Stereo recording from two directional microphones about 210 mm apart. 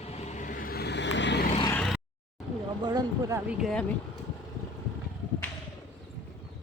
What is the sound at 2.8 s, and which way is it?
Speech, 20° right (ahead or behind).